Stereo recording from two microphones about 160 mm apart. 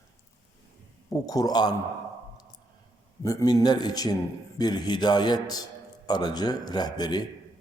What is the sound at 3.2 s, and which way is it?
A man's voice, 20° left (ahead or behind).